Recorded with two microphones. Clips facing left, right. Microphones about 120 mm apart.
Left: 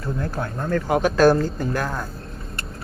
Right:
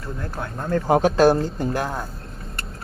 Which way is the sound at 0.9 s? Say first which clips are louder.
Right 1 dB; 30° right (ahead or behind).